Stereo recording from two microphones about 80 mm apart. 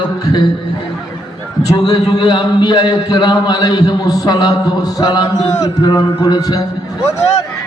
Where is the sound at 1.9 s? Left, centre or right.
Left.